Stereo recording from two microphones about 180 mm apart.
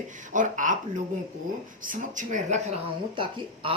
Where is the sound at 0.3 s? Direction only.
45° right (ahead or behind).